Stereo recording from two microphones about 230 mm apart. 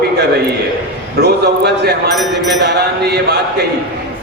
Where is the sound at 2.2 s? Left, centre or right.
Centre.